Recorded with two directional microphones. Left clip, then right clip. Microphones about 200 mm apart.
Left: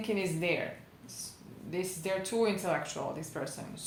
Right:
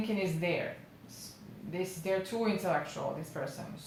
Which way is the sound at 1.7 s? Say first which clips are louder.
Even; 40° left (ahead or behind).